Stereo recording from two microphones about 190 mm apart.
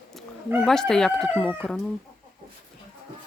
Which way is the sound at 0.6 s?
Centre (ahead or behind).